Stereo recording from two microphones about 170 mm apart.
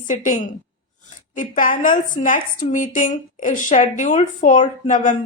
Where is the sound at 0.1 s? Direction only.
50° left (ahead or behind).